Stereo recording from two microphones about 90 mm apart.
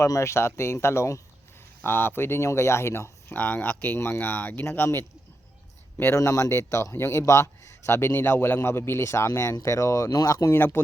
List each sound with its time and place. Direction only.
0.0 s speech: 35° left (ahead or behind)
3.3 s speech: 20° left (ahead or behind)
6.1 s speech: 35° left (ahead or behind)